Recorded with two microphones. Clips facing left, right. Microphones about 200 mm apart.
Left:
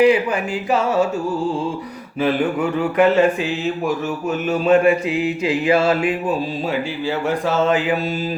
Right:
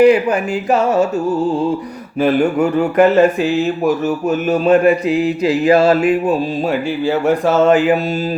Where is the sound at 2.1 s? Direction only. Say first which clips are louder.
Right 5 dB; 45° right (ahead or behind).